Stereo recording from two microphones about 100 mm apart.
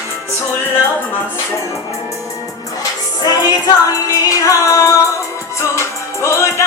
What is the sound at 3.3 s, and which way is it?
Music, 40° left (ahead or behind).